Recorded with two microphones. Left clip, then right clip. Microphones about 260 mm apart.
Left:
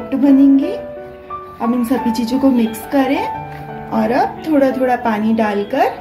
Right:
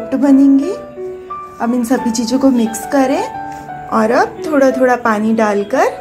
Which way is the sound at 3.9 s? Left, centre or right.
Centre.